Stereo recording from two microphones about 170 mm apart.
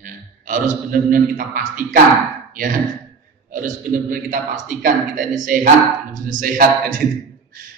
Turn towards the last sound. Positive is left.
turn(degrees=-55)  # may be behind; listen again after turning